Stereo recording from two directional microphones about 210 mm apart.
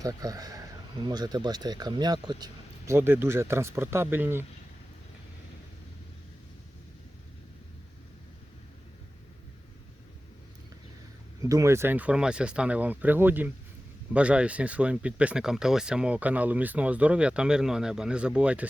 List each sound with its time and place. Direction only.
0.0 s speech: 15° right (ahead or behind)
11.4 s speech: 15° right (ahead or behind)